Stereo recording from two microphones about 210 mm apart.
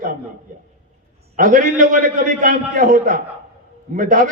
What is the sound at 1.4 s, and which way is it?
A man's voice, 40° right (ahead or behind).